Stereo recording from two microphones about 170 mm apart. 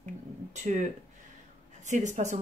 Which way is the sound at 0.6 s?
45° right (ahead or behind).